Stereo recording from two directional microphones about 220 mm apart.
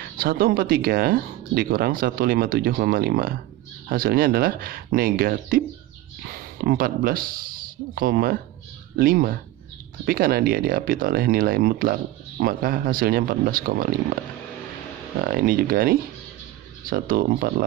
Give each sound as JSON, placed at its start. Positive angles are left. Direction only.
{"t": 0.0, "sound": "speech", "side_deg": -40}
{"t": 15.2, "sound": "speech", "side_deg": -40}